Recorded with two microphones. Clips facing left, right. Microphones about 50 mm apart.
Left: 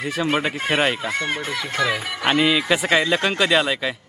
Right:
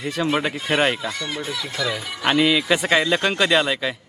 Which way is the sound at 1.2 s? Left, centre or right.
Left.